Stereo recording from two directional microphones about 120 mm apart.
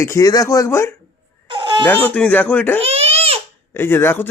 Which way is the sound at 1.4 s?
40° right (ahead or behind).